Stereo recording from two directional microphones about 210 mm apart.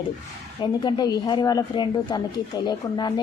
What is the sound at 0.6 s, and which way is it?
Speech, 20° left (ahead or behind).